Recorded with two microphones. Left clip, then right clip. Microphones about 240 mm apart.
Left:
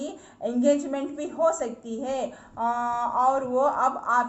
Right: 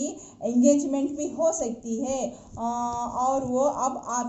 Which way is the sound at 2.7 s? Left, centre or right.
Centre.